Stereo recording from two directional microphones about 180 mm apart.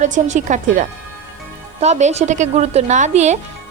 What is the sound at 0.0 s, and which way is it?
A woman's voice, 40° right (ahead or behind).